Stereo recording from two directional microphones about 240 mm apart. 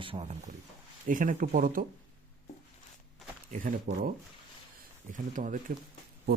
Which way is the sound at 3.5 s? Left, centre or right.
Right.